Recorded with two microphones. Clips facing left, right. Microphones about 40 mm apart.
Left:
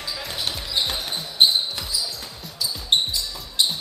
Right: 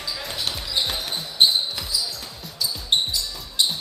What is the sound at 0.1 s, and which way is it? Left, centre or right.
Basketball bounce, centre.